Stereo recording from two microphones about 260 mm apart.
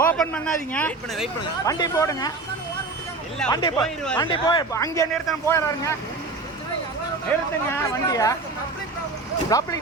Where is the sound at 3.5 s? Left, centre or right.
Centre.